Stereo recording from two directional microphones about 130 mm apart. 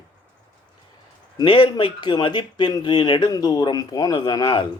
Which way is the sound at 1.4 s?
35° left (ahead or behind).